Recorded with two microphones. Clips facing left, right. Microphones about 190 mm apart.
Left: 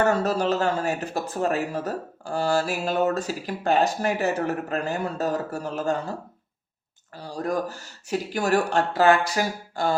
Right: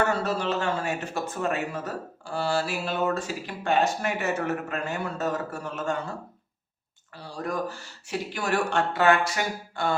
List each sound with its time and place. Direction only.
0.1 s speech: 40° left (ahead or behind)
7.2 s speech: 40° left (ahead or behind)